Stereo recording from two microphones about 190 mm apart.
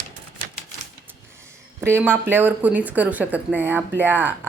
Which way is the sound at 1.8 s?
10° right (ahead or behind).